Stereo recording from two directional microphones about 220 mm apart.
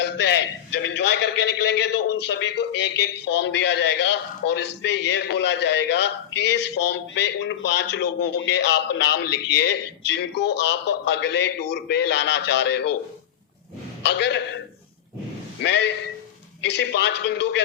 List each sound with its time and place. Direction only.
0.0 s a man's voice: 50° left (ahead or behind)
14.0 s a man's voice: 50° left (ahead or behind)
15.6 s a man's voice: 50° left (ahead or behind)